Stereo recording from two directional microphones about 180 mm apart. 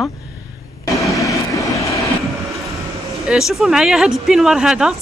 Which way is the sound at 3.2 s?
Centre (ahead or behind).